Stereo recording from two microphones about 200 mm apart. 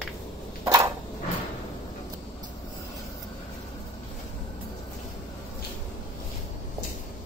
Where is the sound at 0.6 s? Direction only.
15° right (ahead or behind).